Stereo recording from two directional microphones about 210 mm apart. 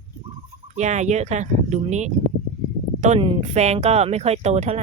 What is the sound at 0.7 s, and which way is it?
Speech, 35° right (ahead or behind).